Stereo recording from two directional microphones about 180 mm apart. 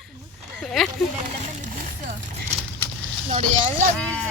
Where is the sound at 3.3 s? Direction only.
40° right (ahead or behind).